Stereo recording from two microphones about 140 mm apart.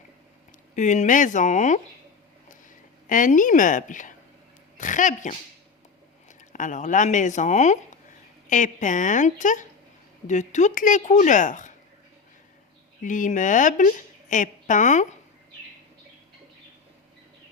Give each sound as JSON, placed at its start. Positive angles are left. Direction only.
{"t": 0.8, "sound": "a woman's voice", "side_deg": 60}
{"t": 2.6, "sound": "a woman's voice", "side_deg": 70}
{"t": 13.0, "sound": "a woman's voice", "side_deg": 70}